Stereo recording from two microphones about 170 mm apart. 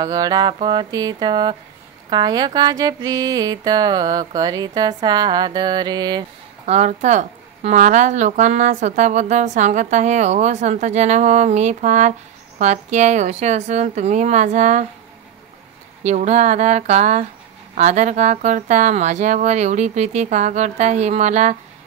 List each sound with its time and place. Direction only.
0.0 s a sound: 20° right (ahead or behind)
6.6 s speech: 45° right (ahead or behind)
16.0 s speech: 40° right (ahead or behind)